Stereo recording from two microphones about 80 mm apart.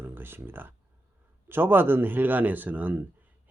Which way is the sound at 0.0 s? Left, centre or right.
Right.